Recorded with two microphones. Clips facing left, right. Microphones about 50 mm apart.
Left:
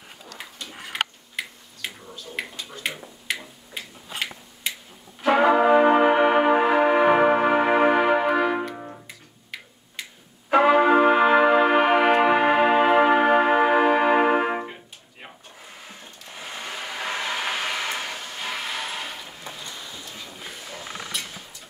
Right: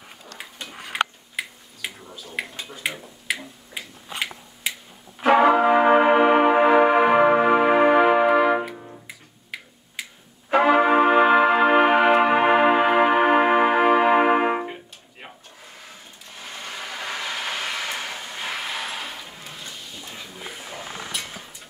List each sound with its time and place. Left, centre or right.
1.3 s finger snapping: centre
2.7 s a sound: centre
5.2 s music: centre
8.7 s music: left
9.0 s tick-tock: centre
10.5 s brass instrument: centre
14.6 s music: centre
16.6 s vehicle: centre
20.1 s a sound: centre